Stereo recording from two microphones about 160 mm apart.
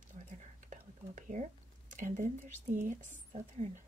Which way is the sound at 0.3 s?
50° right (ahead or behind).